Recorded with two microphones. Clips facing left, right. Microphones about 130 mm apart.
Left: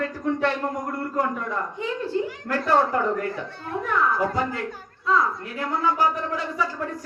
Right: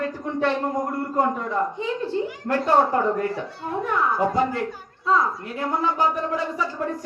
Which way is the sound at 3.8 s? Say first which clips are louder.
Right 1 dB; 25° right (ahead or behind).